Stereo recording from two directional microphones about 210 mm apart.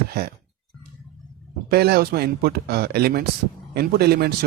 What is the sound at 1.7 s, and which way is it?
Speech, 50° right (ahead or behind).